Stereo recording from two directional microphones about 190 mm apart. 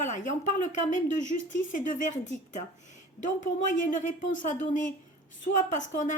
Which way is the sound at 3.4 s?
40° left (ahead or behind).